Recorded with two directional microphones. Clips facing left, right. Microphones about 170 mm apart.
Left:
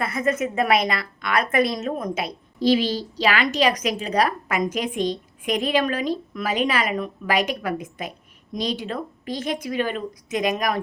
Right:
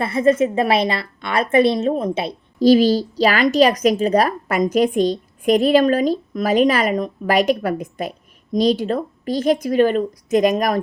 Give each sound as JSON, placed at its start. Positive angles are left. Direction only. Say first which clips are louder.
{"t": 0.0, "sound": "a woman's voice", "louder": "right 7 dB", "side_deg": -30}
{"t": 2.6, "sound": "a woman's voice", "louder": "right 7 dB", "side_deg": -45}